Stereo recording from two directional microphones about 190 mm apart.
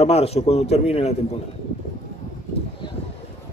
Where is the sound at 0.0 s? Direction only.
30° left (ahead or behind).